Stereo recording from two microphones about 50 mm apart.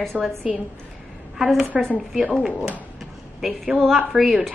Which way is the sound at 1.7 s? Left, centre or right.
Centre.